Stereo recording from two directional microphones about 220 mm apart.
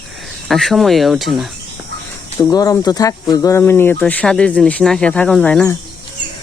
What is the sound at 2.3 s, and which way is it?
Speech, 15° left (ahead or behind).